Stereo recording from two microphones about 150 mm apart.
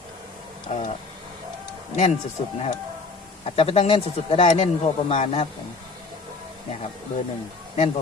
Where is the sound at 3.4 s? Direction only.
40° left (ahead or behind).